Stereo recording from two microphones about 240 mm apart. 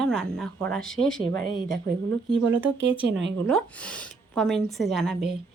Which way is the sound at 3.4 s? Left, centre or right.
Centre.